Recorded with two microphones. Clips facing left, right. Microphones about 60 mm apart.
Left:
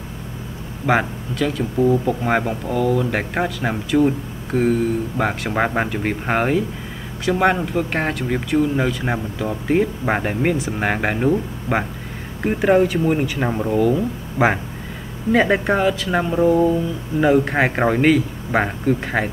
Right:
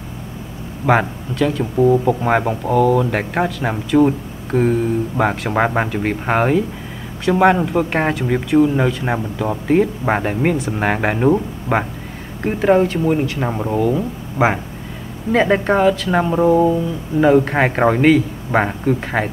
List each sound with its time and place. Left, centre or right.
0.8 s speech: centre
1.8 s speech: centre
11.7 s speech: right
12.4 s speech: centre
13.5 s speech: centre
15.3 s speech: centre
16.3 s speech: centre
17.2 s speech: centre